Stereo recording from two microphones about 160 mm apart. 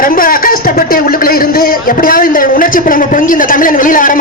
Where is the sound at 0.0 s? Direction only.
60° left (ahead or behind).